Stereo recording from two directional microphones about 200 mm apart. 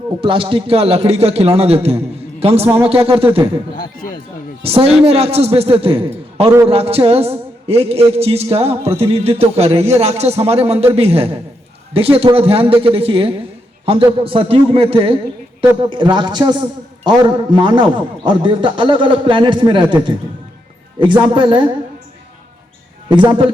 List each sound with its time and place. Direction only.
0.2 s a man's voice: 25° right (ahead or behind)
4.6 s speech: 30° right (ahead or behind)
23.0 s a man's voice: 25° right (ahead or behind)